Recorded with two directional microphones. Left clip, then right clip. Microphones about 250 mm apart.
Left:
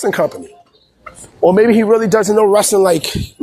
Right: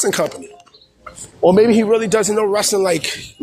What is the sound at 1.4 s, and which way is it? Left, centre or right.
Speech, left.